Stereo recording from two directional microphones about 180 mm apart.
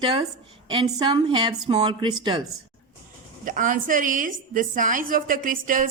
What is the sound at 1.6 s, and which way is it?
Speech, 35° right (ahead or behind).